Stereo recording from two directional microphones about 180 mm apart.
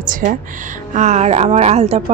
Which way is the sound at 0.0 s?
45° right (ahead or behind).